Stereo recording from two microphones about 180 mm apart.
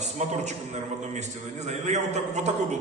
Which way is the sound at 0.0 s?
40° right (ahead or behind).